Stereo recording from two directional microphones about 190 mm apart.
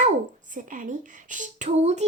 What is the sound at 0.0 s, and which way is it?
A woman's voice, 40° right (ahead or behind).